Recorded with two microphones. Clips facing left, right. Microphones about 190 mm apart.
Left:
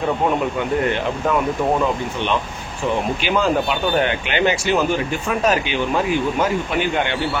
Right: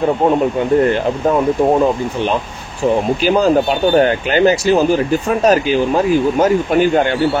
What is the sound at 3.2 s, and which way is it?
Speech, 40° right (ahead or behind).